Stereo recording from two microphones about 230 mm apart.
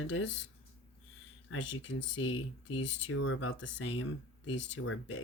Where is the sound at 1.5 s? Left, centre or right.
Left.